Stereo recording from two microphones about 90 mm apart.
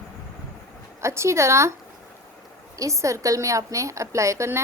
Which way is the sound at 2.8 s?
35° right (ahead or behind).